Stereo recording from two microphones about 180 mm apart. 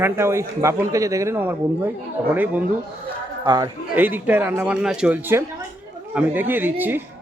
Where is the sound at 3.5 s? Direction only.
20° right (ahead or behind).